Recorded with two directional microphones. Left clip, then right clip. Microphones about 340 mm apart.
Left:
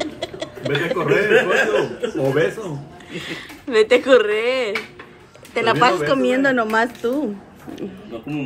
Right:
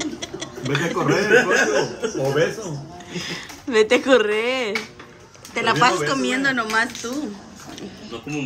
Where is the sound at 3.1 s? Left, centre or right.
Centre.